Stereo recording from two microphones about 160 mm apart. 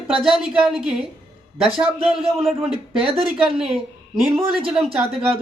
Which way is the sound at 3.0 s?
35° right (ahead or behind).